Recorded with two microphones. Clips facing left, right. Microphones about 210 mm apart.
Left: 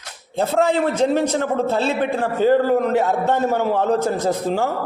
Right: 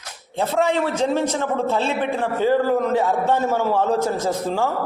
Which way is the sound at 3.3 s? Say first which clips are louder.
Left 1 dB; 65° left (ahead or behind).